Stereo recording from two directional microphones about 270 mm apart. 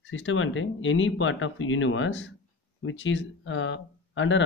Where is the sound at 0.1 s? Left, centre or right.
Left.